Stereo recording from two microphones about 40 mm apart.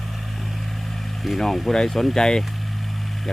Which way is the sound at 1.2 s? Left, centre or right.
Centre.